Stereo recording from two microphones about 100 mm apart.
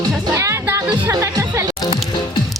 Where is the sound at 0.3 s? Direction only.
25° right (ahead or behind).